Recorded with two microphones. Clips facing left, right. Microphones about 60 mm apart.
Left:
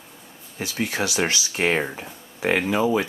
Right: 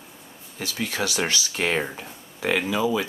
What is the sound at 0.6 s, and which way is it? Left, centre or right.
Speech, centre.